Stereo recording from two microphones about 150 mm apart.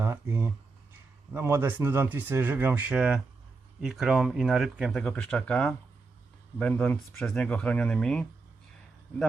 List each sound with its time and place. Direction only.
0.0 s a man's voice: 15° right (ahead or behind)
5.0 s speech: 10° left (ahead or behind)